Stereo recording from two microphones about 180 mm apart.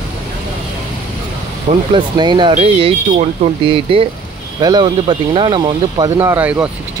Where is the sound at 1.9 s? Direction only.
25° right (ahead or behind); by 6.7 s 5° right (ahead or behind).